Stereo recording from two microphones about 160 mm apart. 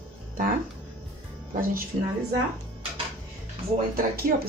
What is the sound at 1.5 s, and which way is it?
Speech, 60° right (ahead or behind).